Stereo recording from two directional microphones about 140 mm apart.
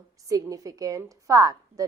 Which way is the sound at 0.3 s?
25° right (ahead or behind).